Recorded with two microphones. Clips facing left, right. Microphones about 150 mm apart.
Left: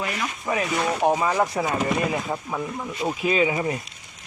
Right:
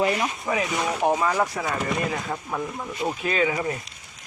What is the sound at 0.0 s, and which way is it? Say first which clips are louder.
Speech: right 6 dB; 30° right (ahead or behind).